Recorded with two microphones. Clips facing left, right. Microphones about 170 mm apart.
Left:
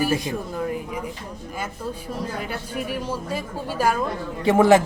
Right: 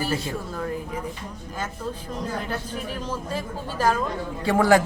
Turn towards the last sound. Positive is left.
turn(degrees=20)  # may be behind; listen again after turning